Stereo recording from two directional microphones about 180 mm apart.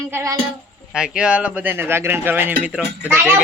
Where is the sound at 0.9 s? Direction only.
5° right (ahead or behind).